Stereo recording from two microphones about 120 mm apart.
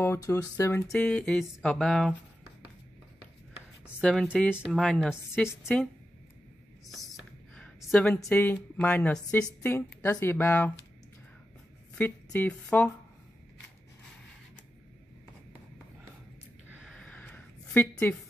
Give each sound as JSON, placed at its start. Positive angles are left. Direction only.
{"t": 0.0, "sound": "speech", "side_deg": 25}
{"t": 0.8, "sound": "speech", "side_deg": 5}
{"t": 4.0, "sound": "speech", "side_deg": 5}
{"t": 7.5, "sound": "a sound", "side_deg": 5}
{"t": 8.3, "sound": "a woman's voice", "side_deg": 15}
{"t": 12.0, "sound": "a woman's voice", "side_deg": 15}
{"t": 16.9, "sound": "a sound", "side_deg": 5}